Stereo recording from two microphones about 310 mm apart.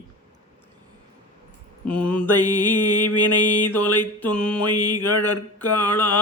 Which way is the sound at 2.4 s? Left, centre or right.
Centre.